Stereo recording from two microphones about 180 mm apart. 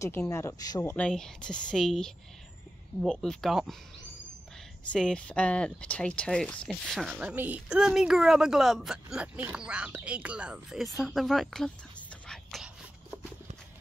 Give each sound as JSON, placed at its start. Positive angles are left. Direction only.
{"t": 0.0, "sound": "speech", "side_deg": 15}
{"t": 0.9, "sound": "speech", "side_deg": 5}
{"t": 4.9, "sound": "speech", "side_deg": 5}
{"t": 12.3, "sound": "a sound", "side_deg": 0}